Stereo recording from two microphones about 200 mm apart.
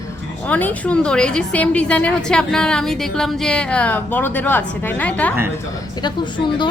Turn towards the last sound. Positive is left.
turn(degrees=25)  # may be behind; listen again after turning